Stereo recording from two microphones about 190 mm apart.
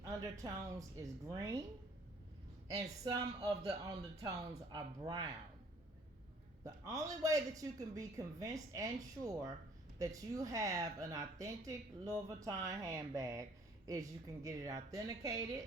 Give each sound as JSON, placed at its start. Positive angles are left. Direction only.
{"t": 0.0, "sound": "speech", "side_deg": -15}
{"t": 2.6, "sound": "speech", "side_deg": -20}
{"t": 6.7, "sound": "speech", "side_deg": -15}